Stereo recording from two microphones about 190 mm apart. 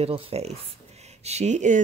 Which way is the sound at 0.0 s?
30° right (ahead or behind).